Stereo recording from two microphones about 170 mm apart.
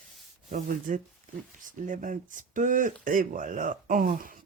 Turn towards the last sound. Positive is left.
turn(degrees=-55)  # may be behind; listen again after turning